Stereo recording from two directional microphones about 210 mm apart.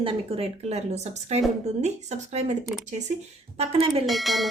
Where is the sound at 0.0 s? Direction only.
30° right (ahead or behind).